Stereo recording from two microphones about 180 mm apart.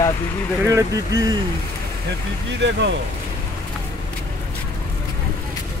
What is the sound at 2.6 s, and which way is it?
Speech, 75° right (ahead or behind).